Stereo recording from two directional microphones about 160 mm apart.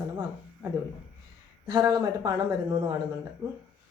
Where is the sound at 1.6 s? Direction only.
25° right (ahead or behind).